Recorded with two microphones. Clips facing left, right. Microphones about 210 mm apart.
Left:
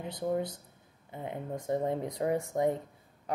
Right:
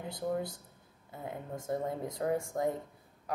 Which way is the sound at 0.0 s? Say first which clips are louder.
Left 3 dB; 20° left (ahead or behind).